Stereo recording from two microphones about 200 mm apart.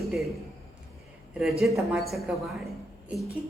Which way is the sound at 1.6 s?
5° right (ahead or behind).